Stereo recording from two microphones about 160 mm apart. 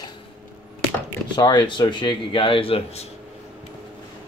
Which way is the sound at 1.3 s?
25° left (ahead or behind).